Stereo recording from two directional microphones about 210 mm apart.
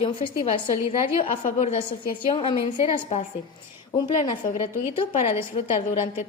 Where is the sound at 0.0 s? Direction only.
30° left (ahead or behind).